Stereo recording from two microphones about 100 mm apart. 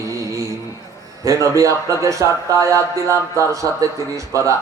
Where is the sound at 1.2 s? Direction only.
35° right (ahead or behind).